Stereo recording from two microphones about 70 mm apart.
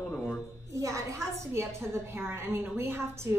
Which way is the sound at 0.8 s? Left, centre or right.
Right.